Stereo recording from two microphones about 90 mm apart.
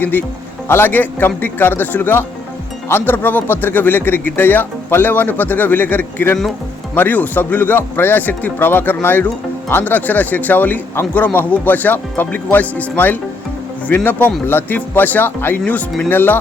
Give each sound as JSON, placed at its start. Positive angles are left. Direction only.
{"t": 0.0, "sound": "speech", "side_deg": 20}